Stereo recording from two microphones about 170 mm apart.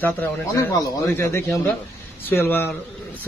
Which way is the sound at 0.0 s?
10° left (ahead or behind).